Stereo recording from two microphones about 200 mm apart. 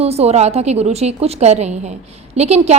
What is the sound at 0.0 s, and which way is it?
A woman's voice, 30° right (ahead or behind).